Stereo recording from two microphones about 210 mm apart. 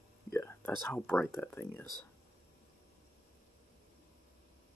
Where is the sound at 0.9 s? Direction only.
10° left (ahead or behind).